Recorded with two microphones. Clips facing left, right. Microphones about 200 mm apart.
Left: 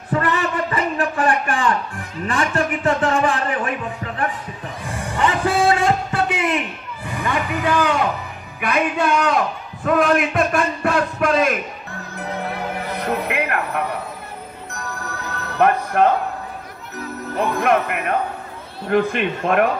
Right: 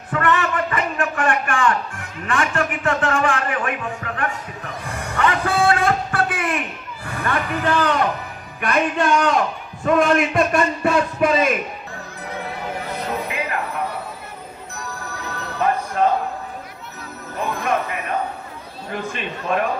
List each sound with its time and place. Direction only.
0.1 s a sound: 35° left (ahead or behind)
2.2 s a man's voice: 35° left (ahead or behind)
5.7 s music: 25° left (ahead or behind)
7.1 s a man's voice: 15° left (ahead or behind); by 11.5 s centre (ahead or behind)
13.0 s a sound: 65° left (ahead or behind)
15.6 s music: 65° left (ahead or behind)
17.6 s a man's voice: 65° left (ahead or behind)